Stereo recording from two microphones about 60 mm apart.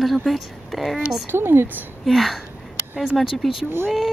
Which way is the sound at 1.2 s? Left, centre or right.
Right.